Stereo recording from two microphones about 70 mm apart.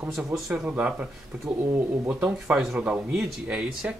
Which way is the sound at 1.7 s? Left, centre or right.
Right.